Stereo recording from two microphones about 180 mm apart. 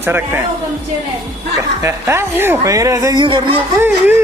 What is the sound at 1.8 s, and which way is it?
Speech, 15° right (ahead or behind).